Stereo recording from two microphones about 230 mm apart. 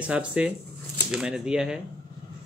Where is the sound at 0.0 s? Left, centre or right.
Centre.